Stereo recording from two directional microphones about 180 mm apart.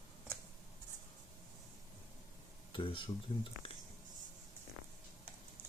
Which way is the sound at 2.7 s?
30° left (ahead or behind).